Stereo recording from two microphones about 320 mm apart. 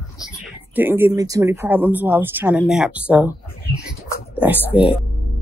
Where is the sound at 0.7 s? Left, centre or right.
Centre.